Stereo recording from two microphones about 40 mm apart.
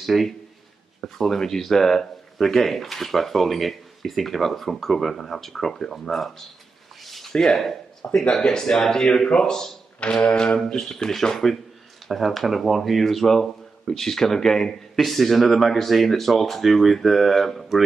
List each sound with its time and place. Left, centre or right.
0.0 s a man's voice: centre
1.0 s speech: centre
7.0 s a sound: centre
7.3 s speech: centre